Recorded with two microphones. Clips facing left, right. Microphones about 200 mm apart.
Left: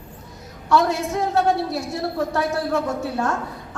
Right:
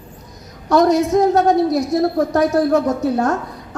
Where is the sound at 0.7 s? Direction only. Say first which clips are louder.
Right 6 dB; 40° right (ahead or behind).